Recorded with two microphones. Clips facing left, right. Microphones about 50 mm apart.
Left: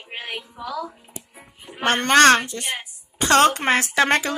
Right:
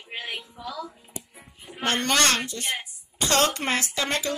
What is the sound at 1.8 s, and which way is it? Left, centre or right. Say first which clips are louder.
Speech: left 8 dB; left.